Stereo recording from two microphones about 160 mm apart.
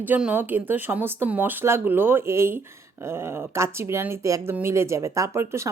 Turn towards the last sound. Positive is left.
turn(degrees=-15)  # may be behind; listen again after turning